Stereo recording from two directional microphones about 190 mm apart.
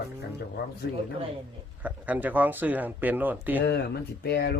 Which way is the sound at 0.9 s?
60° left (ahead or behind).